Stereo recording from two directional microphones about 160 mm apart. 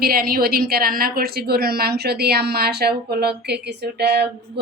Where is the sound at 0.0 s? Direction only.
70° right (ahead or behind).